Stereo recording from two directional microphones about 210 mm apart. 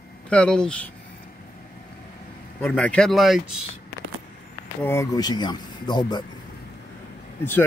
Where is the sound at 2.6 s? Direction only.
5° left (ahead or behind).